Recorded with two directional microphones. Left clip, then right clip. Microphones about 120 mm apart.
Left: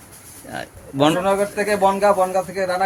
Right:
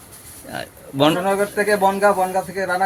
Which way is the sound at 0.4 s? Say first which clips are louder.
Right 1 dB; centre (ahead or behind).